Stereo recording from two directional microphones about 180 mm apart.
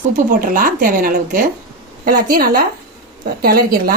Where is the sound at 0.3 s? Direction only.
50° right (ahead or behind).